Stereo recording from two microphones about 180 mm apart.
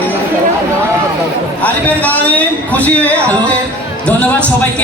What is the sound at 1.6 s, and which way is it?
A man's voice, 10° left (ahead or behind).